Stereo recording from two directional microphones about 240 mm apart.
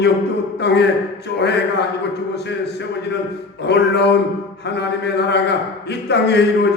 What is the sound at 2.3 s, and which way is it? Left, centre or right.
A man's voice, left.